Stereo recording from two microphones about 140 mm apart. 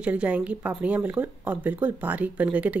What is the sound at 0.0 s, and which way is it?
Speech, 10° right (ahead or behind).